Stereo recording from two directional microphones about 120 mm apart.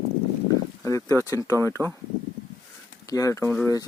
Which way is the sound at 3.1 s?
30° left (ahead or behind).